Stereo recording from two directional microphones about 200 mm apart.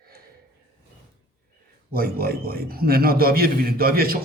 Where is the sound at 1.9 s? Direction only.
50° right (ahead or behind).